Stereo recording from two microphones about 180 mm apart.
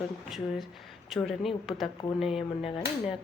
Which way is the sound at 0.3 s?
Centre (ahead or behind).